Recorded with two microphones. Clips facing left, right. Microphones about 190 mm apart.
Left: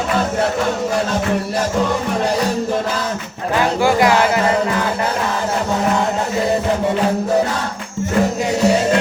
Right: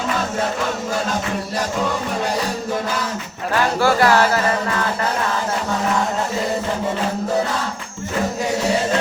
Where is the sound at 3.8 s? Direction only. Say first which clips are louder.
Left 1 dB; 15° left (ahead or behind).